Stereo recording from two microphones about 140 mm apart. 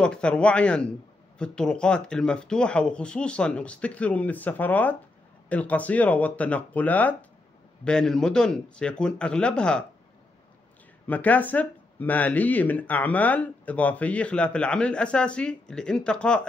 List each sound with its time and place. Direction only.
0.0 s speech: 5° left (ahead or behind)
11.1 s speech: 10° left (ahead or behind)